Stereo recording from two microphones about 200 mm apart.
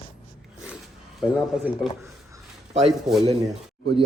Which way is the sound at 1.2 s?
Centre (ahead or behind).